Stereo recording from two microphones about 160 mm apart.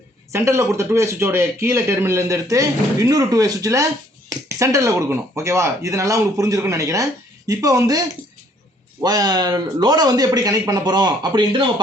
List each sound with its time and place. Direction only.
0.3 s speech: 15° right (ahead or behind)